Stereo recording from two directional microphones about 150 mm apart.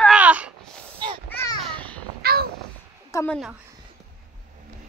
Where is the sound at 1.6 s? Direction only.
10° left (ahead or behind).